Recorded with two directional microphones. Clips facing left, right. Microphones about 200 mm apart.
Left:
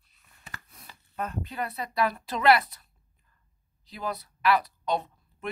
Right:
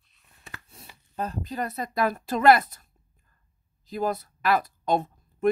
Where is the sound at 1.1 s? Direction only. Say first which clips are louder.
Right 3 dB; 35° right (ahead or behind).